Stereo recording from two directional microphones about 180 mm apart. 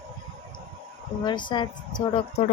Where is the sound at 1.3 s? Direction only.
25° left (ahead or behind).